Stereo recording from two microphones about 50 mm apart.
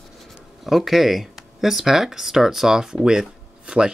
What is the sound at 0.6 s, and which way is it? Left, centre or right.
Speech, centre.